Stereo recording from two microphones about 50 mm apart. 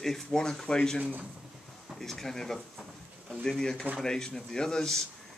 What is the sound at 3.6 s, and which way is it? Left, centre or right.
Speech, centre.